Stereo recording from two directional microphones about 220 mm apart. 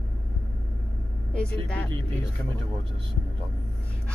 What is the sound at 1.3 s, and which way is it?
Speech, 5° left (ahead or behind).